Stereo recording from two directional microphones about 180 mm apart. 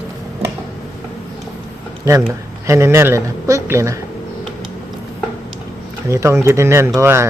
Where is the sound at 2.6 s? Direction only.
15° right (ahead or behind).